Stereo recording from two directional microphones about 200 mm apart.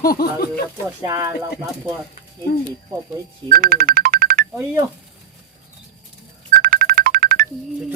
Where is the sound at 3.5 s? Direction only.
45° right (ahead or behind).